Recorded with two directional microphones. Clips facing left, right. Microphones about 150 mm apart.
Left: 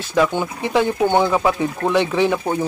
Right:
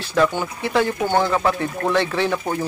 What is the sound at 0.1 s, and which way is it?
Speech, 15° left (ahead or behind).